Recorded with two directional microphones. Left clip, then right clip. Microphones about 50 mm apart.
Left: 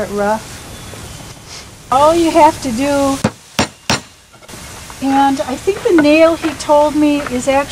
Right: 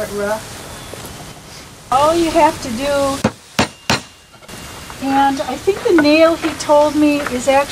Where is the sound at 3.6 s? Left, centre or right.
Left.